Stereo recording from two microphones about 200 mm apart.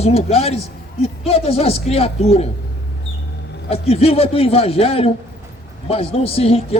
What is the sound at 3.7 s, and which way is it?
A man's voice, 30° left (ahead or behind).